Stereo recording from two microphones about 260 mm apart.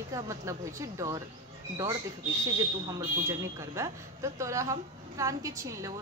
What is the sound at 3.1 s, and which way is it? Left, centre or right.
Speech, centre.